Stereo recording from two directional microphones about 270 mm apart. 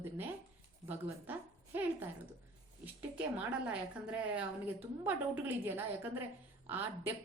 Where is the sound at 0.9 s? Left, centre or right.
Centre.